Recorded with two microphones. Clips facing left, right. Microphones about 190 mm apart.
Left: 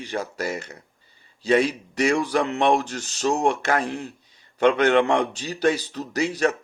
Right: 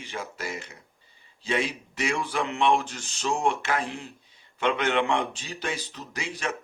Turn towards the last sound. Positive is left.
turn(degrees=40)  # may be behind; listen again after turning